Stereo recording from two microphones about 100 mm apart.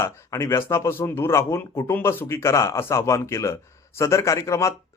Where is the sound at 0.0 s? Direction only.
30° left (ahead or behind).